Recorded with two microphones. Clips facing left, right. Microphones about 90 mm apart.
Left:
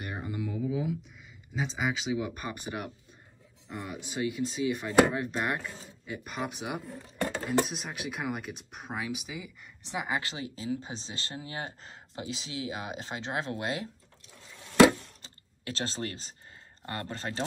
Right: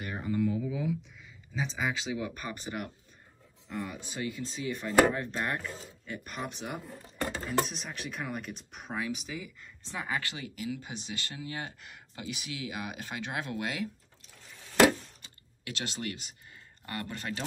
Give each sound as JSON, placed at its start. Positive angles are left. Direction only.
{"t": 0.0, "sound": "a sound", "side_deg": 15}
{"t": 1.5, "sound": "speech", "side_deg": 5}
{"t": 3.6, "sound": "speech", "side_deg": 30}
{"t": 4.2, "sound": "speech", "side_deg": 15}
{"t": 4.7, "sound": "chopping", "side_deg": 5}
{"t": 7.2, "sound": "speech", "side_deg": 0}
{"t": 15.2, "sound": "a sound", "side_deg": 35}
{"t": 16.8, "sound": "speech", "side_deg": 30}